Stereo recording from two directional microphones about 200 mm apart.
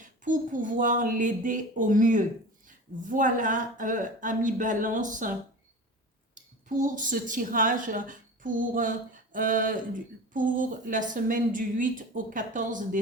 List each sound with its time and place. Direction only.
0.0 s speech: 40° right (ahead or behind)